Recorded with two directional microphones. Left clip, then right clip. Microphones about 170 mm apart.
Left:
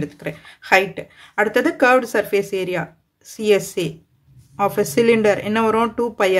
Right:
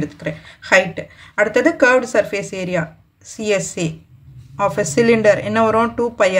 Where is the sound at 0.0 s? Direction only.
40° left (ahead or behind).